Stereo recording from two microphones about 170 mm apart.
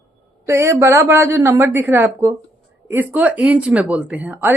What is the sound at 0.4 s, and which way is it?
A woman's voice, 15° right (ahead or behind).